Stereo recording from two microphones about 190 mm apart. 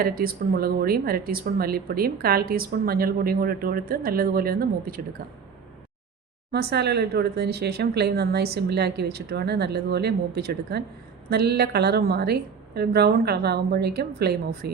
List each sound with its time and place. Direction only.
0.0 s speech: 50° right (ahead or behind)
6.5 s speech: 60° right (ahead or behind)